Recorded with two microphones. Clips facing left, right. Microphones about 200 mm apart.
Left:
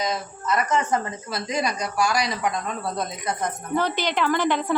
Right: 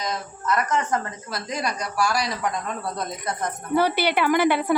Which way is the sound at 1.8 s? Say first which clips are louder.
Left 1 dB; 20° left (ahead or behind).